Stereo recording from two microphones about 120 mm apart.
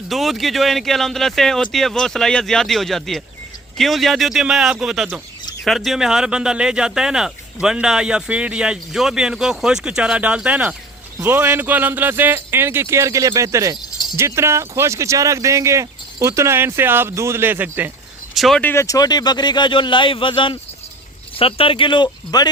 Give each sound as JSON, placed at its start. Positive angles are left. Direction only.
{"t": 0.1, "sound": "speech", "side_deg": 0}
{"t": 18.3, "sound": "speech", "side_deg": 0}
{"t": 18.6, "sound": "speech", "side_deg": 20}